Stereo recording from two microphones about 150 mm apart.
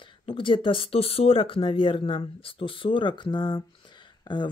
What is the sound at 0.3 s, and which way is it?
Speech, 35° left (ahead or behind).